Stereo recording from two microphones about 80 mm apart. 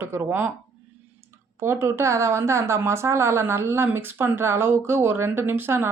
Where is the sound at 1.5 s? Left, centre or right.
Right.